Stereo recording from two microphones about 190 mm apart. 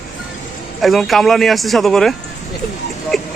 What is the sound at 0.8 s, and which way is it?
Speech, centre (ahead or behind).